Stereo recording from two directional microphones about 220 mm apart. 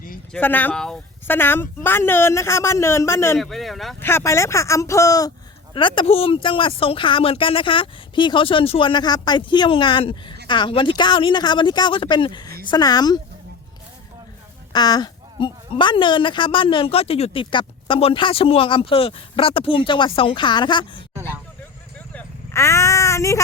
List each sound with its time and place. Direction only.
0.3 s speech: 10° left (ahead or behind)
3.3 s speech: centre (ahead or behind)
4.0 s speech: 10° left (ahead or behind)
14.7 s speech: 20° left (ahead or behind)
22.1 s a sound: 10° left (ahead or behind)